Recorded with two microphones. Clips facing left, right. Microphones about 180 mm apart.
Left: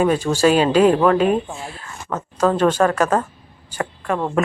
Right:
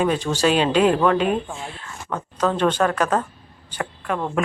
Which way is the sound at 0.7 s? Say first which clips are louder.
Left 3 dB; 40° left (ahead or behind).